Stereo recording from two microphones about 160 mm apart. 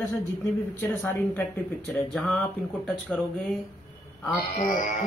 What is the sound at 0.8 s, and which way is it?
A man's voice, 10° left (ahead or behind).